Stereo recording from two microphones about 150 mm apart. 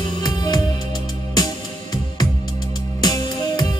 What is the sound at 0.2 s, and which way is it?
Music, 30° left (ahead or behind).